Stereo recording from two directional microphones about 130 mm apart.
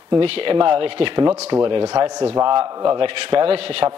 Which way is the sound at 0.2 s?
45° right (ahead or behind).